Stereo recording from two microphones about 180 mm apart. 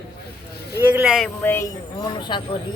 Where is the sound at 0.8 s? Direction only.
10° right (ahead or behind).